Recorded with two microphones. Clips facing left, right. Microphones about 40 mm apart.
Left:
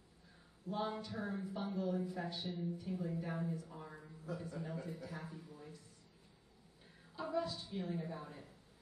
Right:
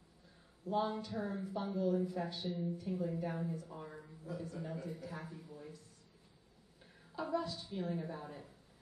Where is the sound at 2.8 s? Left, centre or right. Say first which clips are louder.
Right 3 dB; right.